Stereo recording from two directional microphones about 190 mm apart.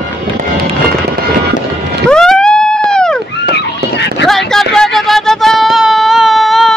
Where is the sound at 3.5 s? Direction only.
65° left (ahead or behind).